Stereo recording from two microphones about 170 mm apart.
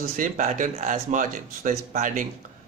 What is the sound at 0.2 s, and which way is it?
Speech, 45° right (ahead or behind).